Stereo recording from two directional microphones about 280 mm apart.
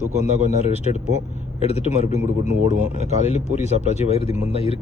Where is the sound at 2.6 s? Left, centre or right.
Right.